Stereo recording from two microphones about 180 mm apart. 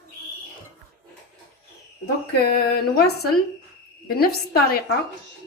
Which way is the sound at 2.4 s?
60° left (ahead or behind).